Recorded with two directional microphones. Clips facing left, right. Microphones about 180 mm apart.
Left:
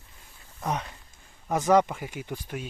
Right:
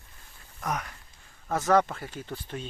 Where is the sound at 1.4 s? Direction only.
15° left (ahead or behind).